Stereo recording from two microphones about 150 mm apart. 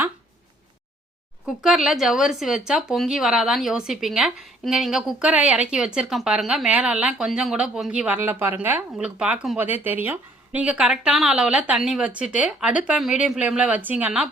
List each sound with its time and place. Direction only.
1.5 s speech: centre (ahead or behind)